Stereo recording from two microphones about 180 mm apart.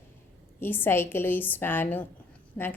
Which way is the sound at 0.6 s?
10° left (ahead or behind).